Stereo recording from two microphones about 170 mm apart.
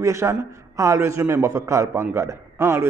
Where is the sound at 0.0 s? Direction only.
15° right (ahead or behind).